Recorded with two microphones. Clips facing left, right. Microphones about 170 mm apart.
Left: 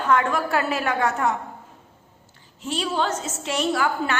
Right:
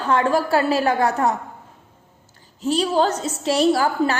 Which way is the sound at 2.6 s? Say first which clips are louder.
Right 6 dB; 40° right (ahead or behind).